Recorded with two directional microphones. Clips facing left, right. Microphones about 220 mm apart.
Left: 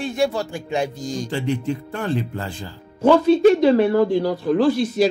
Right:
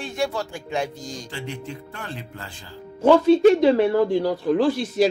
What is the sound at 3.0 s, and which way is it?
Speech, 20° right (ahead or behind).